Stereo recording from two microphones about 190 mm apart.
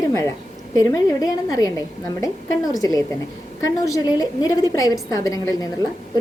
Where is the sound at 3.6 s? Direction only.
15° left (ahead or behind).